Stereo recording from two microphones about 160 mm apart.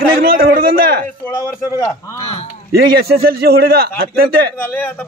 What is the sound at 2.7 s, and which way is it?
A man's voice, 75° right (ahead or behind).